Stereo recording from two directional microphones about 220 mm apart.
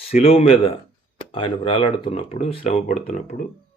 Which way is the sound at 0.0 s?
25° left (ahead or behind).